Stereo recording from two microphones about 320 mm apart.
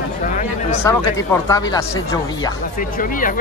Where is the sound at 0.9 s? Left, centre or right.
Centre.